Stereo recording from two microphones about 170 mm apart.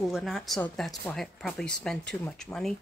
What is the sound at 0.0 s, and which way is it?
Speech, centre (ahead or behind).